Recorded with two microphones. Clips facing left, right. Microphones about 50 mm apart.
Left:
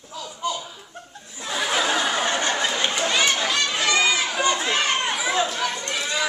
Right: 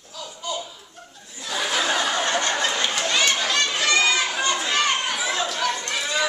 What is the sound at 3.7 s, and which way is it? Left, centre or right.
Crowd, centre.